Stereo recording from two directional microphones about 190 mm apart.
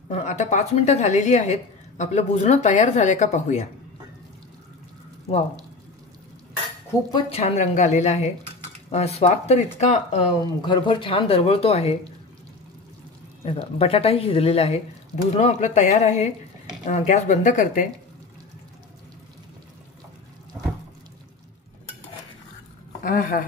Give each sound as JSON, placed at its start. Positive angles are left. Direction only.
{"t": 0.1, "sound": "a woman's voice", "side_deg": 35}
{"t": 7.1, "sound": "a woman's voice", "side_deg": 25}
{"t": 10.6, "sound": "a woman's voice", "side_deg": 25}
{"t": 13.4, "sound": "a woman's voice", "side_deg": 30}
{"t": 23.0, "sound": "speech", "side_deg": 50}